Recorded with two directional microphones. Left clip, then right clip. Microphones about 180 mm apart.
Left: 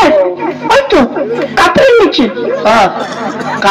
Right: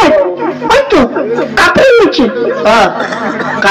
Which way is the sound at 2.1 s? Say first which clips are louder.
Right 1 dB; 25° left (ahead or behind).